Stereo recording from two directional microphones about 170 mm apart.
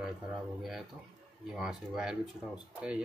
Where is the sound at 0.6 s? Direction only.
Centre (ahead or behind).